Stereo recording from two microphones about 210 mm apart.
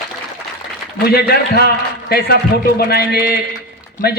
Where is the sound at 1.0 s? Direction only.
50° left (ahead or behind).